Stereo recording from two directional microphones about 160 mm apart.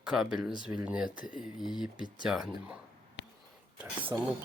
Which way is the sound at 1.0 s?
55° left (ahead or behind).